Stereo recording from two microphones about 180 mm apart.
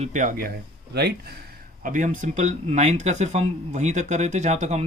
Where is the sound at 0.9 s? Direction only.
65° right (ahead or behind).